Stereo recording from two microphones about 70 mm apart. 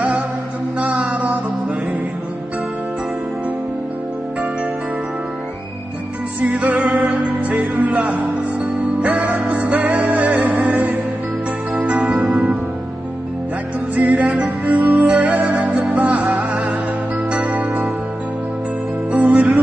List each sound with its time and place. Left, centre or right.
0.7 s music: centre
6.4 s music: right
13.9 s music: right
19.1 s music: right